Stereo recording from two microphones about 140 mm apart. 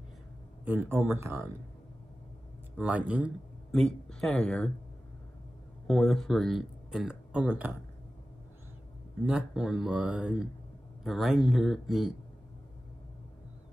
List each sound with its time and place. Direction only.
0.7 s speech: 15° right (ahead or behind)
2.8 s speech: 10° right (ahead or behind)
3.7 s speech: centre (ahead or behind)
5.9 s speech: centre (ahead or behind)
9.2 s speech: 5° right (ahead or behind)